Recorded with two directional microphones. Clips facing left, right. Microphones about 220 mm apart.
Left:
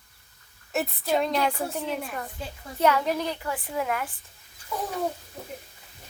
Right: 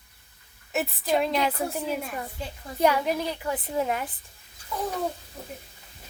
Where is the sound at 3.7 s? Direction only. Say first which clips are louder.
Right 1 dB; 30° right (ahead or behind).